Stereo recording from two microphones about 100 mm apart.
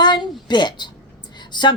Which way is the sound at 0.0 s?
50° left (ahead or behind).